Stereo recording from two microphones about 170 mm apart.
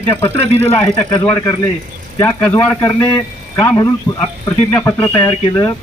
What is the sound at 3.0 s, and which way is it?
Speech, 20° left (ahead or behind).